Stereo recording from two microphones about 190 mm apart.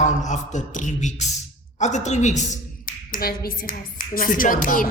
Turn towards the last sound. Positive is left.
turn(degrees=45)  # may be behind; listen again after turning